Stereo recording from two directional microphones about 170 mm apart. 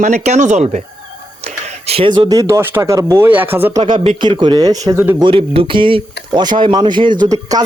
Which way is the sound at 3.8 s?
30° right (ahead or behind).